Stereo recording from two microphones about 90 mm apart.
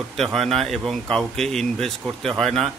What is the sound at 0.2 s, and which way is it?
Speech, 5° left (ahead or behind).